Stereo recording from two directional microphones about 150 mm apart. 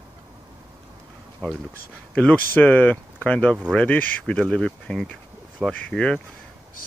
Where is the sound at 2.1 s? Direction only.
10° left (ahead or behind).